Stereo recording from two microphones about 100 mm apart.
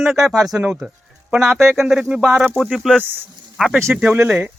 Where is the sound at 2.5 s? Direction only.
10° left (ahead or behind).